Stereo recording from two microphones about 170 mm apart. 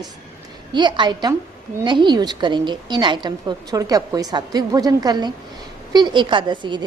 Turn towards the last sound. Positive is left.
turn(degrees=-25)  # may be behind; listen again after turning